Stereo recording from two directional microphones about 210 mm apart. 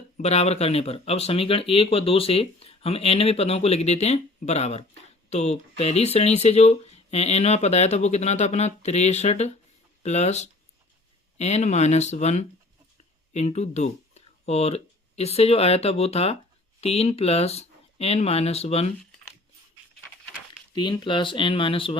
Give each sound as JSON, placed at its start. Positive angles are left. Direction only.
{"t": 0.2, "sound": "speech", "side_deg": 30}
{"t": 20.7, "sound": "speech", "side_deg": 20}